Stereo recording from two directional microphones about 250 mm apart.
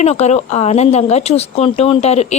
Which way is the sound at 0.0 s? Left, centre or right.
Left.